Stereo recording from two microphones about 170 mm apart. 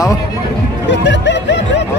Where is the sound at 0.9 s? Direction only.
90° left.